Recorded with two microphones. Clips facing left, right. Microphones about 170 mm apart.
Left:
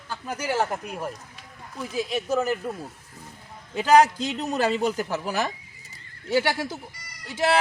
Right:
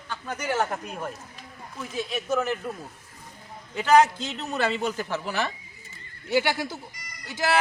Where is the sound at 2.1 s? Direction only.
35° left (ahead or behind).